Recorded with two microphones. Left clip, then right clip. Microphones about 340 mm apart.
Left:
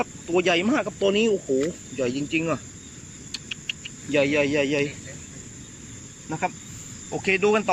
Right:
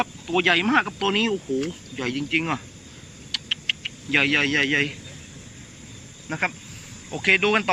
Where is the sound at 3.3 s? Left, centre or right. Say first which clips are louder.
Right 7 dB; centre.